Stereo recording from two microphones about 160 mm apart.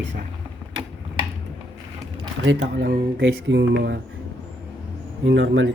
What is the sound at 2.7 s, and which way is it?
Speech, 90° right.